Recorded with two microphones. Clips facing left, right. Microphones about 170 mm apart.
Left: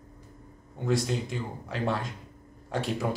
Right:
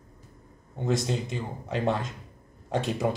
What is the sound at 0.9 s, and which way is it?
Speech, 20° right (ahead or behind).